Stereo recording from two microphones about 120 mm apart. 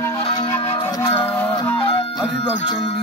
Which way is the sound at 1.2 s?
15° left (ahead or behind).